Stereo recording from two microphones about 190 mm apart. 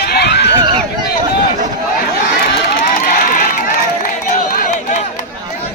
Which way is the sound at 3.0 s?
50° left (ahead or behind).